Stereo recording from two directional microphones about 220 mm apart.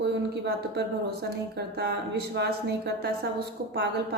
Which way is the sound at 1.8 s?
50° right (ahead or behind).